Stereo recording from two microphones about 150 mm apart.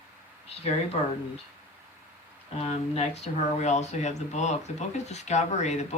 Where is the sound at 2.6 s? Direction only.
45° left (ahead or behind).